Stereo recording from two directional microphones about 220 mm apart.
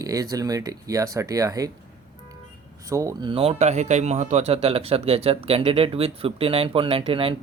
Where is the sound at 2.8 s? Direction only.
15° right (ahead or behind).